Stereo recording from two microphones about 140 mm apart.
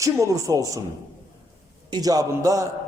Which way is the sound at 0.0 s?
25° right (ahead or behind).